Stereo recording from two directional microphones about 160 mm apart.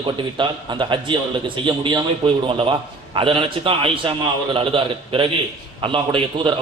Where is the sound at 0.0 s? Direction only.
30° right (ahead or behind).